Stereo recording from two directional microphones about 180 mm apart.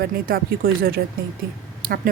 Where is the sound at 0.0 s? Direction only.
55° right (ahead or behind).